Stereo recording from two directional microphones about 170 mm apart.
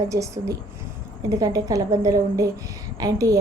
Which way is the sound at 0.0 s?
20° right (ahead or behind).